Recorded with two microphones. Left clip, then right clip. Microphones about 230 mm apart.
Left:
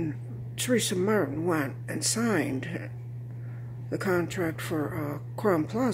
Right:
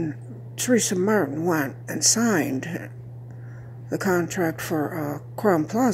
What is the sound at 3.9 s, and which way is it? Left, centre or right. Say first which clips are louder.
Speech: right 4 dB; centre.